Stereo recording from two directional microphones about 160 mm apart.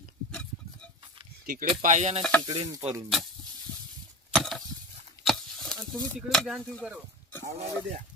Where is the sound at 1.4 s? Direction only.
60° right (ahead or behind).